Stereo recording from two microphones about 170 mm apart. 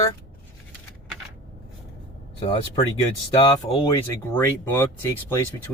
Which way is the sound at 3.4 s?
25° left (ahead or behind).